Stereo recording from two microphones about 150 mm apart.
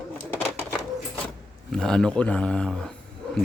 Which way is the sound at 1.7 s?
5° left (ahead or behind).